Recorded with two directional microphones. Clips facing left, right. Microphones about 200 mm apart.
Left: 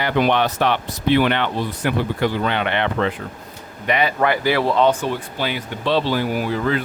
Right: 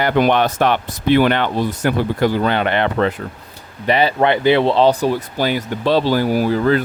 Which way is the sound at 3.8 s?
30° right (ahead or behind).